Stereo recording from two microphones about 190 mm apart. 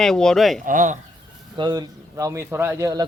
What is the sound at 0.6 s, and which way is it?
Speech, 45° right (ahead or behind).